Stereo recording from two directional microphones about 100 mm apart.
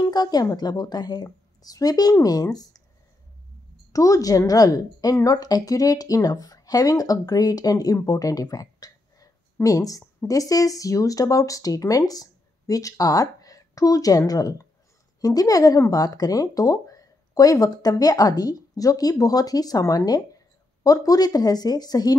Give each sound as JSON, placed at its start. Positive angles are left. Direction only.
{"t": 0.0, "sound": "a woman's voice", "side_deg": 40}
{"t": 3.9, "sound": "a woman's voice", "side_deg": 35}